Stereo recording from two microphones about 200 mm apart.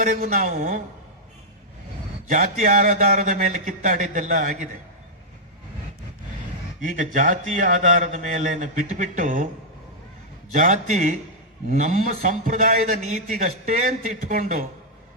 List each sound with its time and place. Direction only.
0.0 s a man's voice: 45° right (ahead or behind)
2.2 s a man's voice: 40° right (ahead or behind)
6.9 s a man's voice: 40° right (ahead or behind)
10.5 s a man's voice: 40° right (ahead or behind)